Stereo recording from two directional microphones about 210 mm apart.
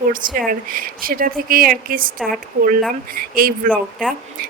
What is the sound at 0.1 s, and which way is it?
Speech, 40° right (ahead or behind).